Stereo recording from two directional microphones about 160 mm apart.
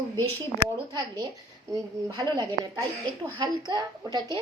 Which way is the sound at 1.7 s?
20° right (ahead or behind).